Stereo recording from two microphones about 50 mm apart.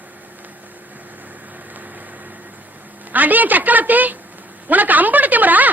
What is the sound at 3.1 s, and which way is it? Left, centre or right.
A woman's voice, right.